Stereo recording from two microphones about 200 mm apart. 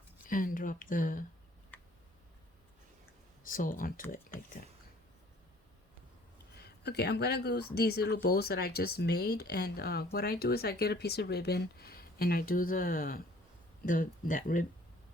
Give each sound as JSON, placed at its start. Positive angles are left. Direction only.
{"t": 0.3, "sound": "speech", "side_deg": 45}
{"t": 3.4, "sound": "speech", "side_deg": 45}
{"t": 6.6, "sound": "speech", "side_deg": 55}